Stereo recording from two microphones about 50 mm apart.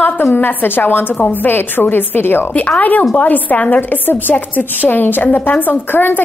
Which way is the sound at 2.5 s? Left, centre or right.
Left.